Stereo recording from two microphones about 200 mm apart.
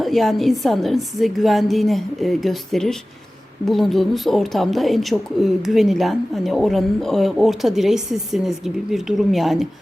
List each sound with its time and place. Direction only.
0.0 s a woman's voice: centre (ahead or behind)